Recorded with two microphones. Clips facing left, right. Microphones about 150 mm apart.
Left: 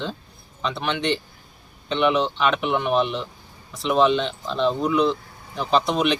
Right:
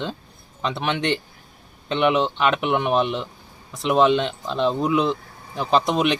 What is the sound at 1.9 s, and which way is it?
Speech, 15° right (ahead or behind).